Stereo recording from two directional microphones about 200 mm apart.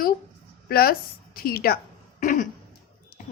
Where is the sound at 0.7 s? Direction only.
50° left (ahead or behind).